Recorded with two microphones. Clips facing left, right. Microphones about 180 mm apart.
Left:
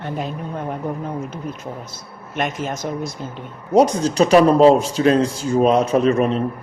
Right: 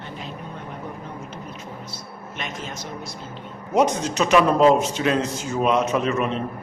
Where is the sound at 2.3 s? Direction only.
50° left (ahead or behind).